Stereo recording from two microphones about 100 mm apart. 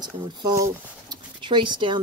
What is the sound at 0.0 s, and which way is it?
Speech, 45° right (ahead or behind).